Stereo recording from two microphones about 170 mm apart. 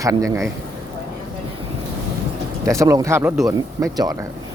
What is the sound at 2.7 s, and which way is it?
Speech, 20° right (ahead or behind).